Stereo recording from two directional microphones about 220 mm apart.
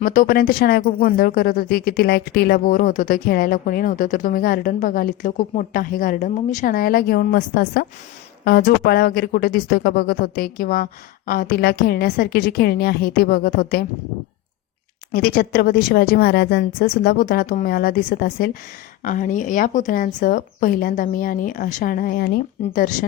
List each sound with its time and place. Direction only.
0.0 s a woman's voice: 40° left (ahead or behind)
15.1 s a woman's voice: 45° left (ahead or behind)